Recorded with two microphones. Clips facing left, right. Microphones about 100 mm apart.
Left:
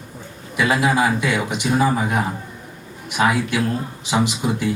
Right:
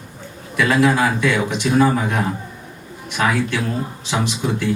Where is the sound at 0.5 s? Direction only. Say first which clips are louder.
Right 2 dB; 15° left (ahead or behind).